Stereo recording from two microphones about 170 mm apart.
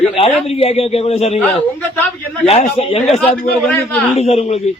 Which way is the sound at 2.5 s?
35° left (ahead or behind).